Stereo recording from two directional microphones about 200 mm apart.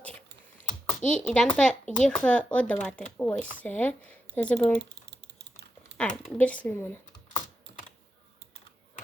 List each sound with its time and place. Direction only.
1.0 s speech: 5° left (ahead or behind)
4.8 s typing: 55° right (ahead or behind)
6.0 s speech: 5° left (ahead or behind)